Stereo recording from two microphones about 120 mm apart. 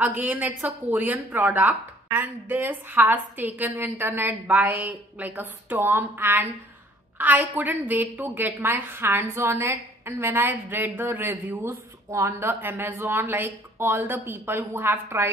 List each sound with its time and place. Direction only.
0.0 s a woman's voice: 15° right (ahead or behind)